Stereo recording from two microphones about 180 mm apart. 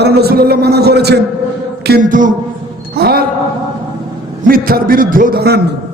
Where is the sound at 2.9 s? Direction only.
60° right (ahead or behind).